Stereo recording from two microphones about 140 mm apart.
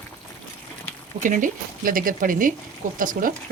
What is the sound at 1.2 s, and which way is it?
Speech, 80° right.